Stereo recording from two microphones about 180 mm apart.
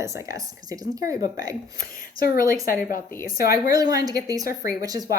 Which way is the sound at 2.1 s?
55° left (ahead or behind).